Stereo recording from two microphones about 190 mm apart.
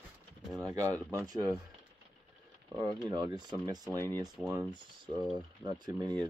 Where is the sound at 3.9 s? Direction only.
15° left (ahead or behind).